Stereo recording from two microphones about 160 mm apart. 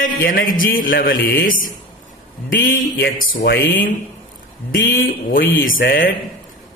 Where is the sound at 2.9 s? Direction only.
65° left (ahead or behind).